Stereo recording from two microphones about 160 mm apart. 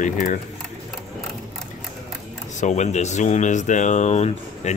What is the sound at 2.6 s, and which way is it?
Speech, 45° left (ahead or behind).